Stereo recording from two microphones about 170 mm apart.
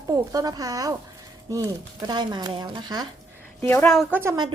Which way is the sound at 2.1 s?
25° right (ahead or behind).